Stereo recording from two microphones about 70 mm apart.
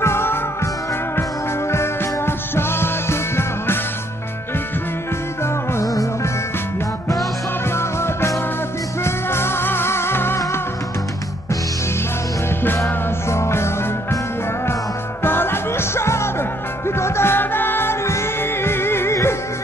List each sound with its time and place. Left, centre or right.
0.0 s music: left
1.7 s music: left
5.4 s music: left
7.7 s music: left
13.3 s music: left
15.2 s music: left